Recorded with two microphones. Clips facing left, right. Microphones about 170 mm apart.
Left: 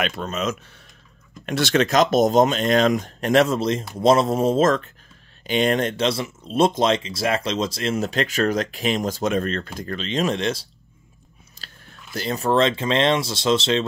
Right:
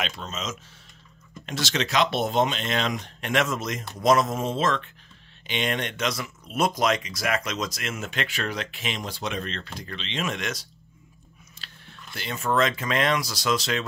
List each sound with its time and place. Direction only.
0.0 s speech: 55° left (ahead or behind); by 10.7 s 30° left (ahead or behind)
11.5 s a sound: 40° left (ahead or behind)
12.1 s speech: 40° left (ahead or behind)